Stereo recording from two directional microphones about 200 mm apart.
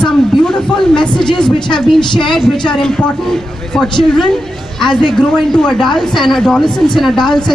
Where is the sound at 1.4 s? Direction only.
25° left (ahead or behind).